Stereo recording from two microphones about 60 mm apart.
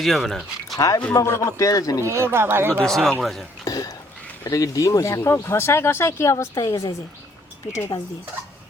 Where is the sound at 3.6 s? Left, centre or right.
Left.